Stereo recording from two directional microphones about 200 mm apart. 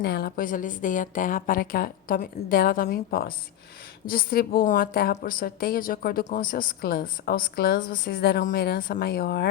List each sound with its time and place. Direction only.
0.0 s a woman's voice: 50° left (ahead or behind)